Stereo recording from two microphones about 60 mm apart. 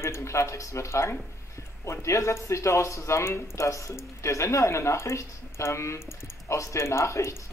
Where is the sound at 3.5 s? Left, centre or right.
Left.